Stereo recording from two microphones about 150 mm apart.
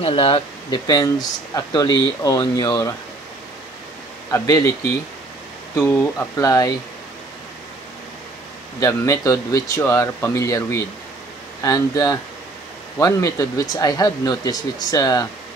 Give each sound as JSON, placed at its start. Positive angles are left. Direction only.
{"t": 0.0, "sound": "speech", "side_deg": 40}
{"t": 0.8, "sound": "speech", "side_deg": 25}
{"t": 4.3, "sound": "speech", "side_deg": 20}
{"t": 5.8, "sound": "speech", "side_deg": 20}
{"t": 8.7, "sound": "speech", "side_deg": 20}